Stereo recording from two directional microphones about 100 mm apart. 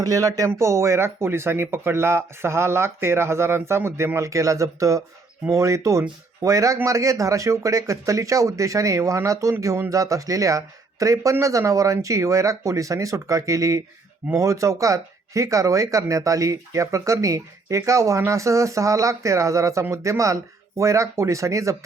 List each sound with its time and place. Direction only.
0.0 s speech: 35° right (ahead or behind)